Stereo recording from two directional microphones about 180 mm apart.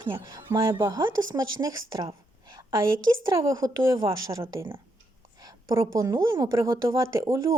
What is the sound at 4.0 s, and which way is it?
Speech, 30° right (ahead or behind).